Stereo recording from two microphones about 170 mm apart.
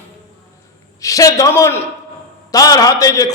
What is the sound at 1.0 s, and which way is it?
A man's voice, 20° left (ahead or behind).